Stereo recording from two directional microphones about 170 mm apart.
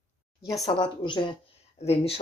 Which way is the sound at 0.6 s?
30° left (ahead or behind).